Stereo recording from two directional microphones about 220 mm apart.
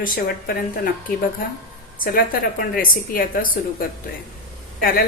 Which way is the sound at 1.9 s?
40° left (ahead or behind).